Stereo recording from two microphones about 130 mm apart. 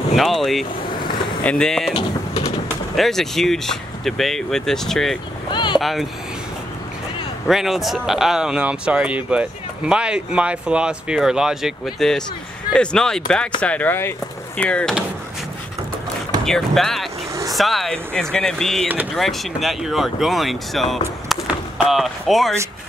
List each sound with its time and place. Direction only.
0.1 s speech: centre (ahead or behind)
3.0 s speech: 5° left (ahead or behind)
5.5 s a sound: 35° left (ahead or behind)
5.8 s speech: centre (ahead or behind)
7.4 s speech: centre (ahead or behind)
16.4 s speech: 5° left (ahead or behind)
21.3 s a sound: 5° right (ahead or behind)